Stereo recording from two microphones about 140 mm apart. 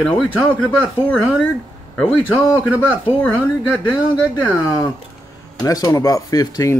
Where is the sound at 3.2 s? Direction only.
10° left (ahead or behind).